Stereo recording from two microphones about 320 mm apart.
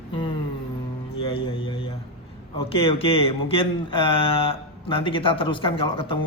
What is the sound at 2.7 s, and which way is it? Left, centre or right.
Speech, centre.